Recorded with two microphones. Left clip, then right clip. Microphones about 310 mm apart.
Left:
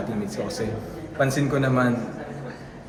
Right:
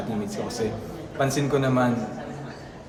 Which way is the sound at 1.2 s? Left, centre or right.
Centre.